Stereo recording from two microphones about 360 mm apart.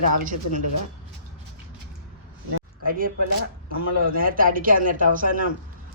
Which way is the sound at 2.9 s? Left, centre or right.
Right.